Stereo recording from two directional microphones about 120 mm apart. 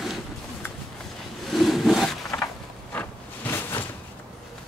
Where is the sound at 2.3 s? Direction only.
15° left (ahead or behind).